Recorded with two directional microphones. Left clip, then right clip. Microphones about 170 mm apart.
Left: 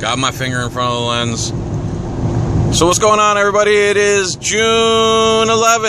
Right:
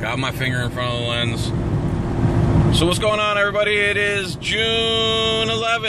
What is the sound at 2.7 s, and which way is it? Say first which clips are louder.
Speech: left 9 dB; 25° left (ahead or behind).